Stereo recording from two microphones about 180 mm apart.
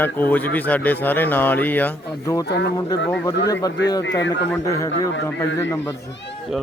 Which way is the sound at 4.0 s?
80° left.